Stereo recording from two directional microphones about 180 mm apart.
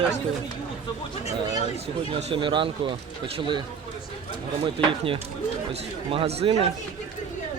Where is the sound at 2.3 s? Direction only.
25° right (ahead or behind).